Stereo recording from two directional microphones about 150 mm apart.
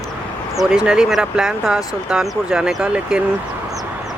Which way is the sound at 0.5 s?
5° right (ahead or behind).